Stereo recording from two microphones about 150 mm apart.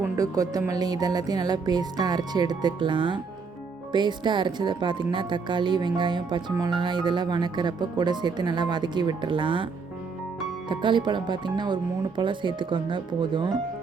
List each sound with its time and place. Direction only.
0.2 s speech: 25° right (ahead or behind)
10.7 s speech: 30° right (ahead or behind)